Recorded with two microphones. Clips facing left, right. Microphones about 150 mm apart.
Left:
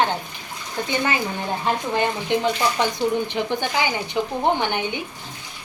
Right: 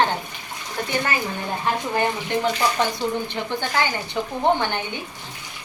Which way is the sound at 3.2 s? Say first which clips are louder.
Left 3 dB; 15° left (ahead or behind).